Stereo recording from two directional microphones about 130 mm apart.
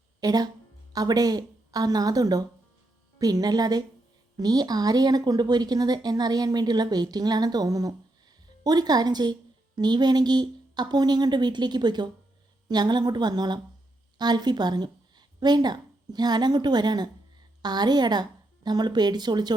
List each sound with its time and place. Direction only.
0.2 s a woman's voice: 30° right (ahead or behind)